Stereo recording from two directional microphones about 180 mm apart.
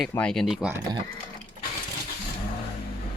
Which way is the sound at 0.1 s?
5° left (ahead or behind).